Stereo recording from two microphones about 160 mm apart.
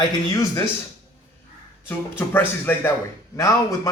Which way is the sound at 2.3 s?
15° left (ahead or behind).